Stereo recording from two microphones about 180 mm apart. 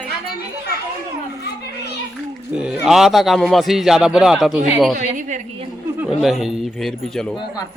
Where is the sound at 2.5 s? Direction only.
5° right (ahead or behind).